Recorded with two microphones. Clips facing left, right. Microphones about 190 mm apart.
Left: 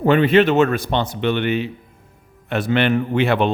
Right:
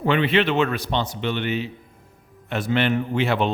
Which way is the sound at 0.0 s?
45° left (ahead or behind).